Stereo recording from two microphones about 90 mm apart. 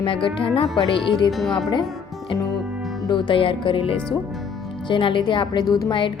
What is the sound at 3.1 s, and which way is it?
Speech, 65° left (ahead or behind).